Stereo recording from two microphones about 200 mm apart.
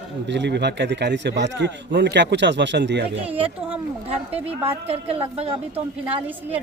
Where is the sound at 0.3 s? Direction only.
60° right (ahead or behind).